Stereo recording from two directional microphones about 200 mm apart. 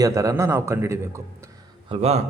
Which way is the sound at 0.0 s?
15° right (ahead or behind).